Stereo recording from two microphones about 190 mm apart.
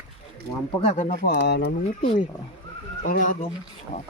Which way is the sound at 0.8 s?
40° left (ahead or behind).